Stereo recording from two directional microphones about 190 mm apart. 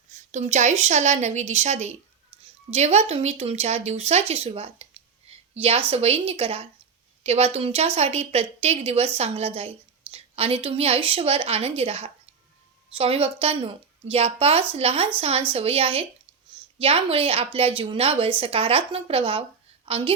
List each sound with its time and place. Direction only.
0.3 s a woman's voice: 40° right (ahead or behind)